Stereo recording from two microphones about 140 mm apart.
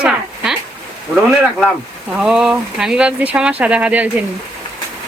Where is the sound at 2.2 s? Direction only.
5° right (ahead or behind).